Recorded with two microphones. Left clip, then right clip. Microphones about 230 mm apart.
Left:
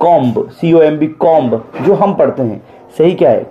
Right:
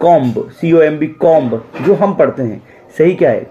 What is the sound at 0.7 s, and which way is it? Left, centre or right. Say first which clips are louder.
Speech: left 1 dB; centre.